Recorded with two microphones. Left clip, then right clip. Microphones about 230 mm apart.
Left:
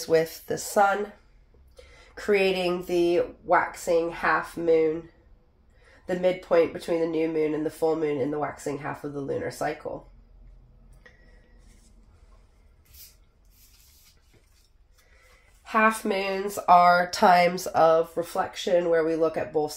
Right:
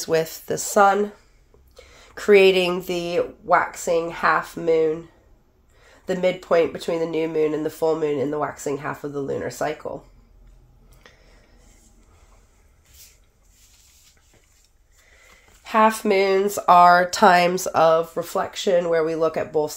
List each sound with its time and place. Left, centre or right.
0.0 s speech: right
2.1 s speech: right
6.0 s speech: right
11.0 s finger snapping: right
15.6 s speech: right